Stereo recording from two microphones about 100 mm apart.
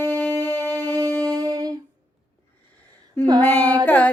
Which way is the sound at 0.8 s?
40° right (ahead or behind).